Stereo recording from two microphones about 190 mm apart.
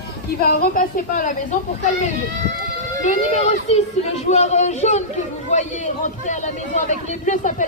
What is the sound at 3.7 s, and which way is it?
Speech, 35° left (ahead or behind).